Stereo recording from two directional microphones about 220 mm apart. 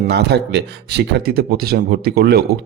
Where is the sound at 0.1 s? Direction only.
50° right (ahead or behind).